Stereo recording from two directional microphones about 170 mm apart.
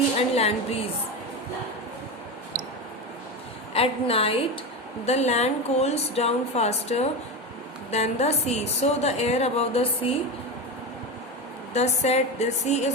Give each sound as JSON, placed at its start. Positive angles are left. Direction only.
{"t": 0.2, "sound": "a sound", "side_deg": 40}
{"t": 3.8, "sound": "a woman's voice", "side_deg": 35}
{"t": 11.7, "sound": "a woman's voice", "side_deg": 40}